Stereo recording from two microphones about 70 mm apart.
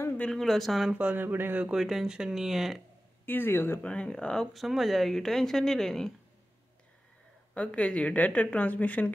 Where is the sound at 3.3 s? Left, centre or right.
Left.